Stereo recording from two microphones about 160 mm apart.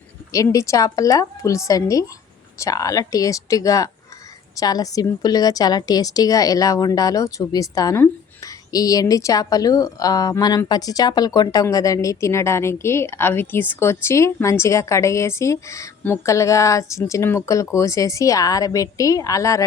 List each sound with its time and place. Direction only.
0.3 s a woman's voice: 20° left (ahead or behind)